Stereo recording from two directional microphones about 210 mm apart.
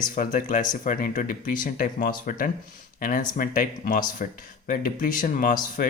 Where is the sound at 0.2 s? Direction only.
40° left (ahead or behind).